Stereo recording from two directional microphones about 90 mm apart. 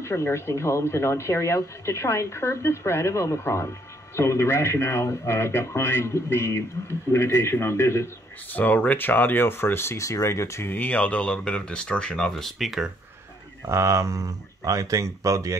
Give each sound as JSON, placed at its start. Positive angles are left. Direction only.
{"t": 0.0, "sound": "speech", "side_deg": 30}
{"t": 8.5, "sound": "speech", "side_deg": 20}
{"t": 13.7, "sound": "speech", "side_deg": -35}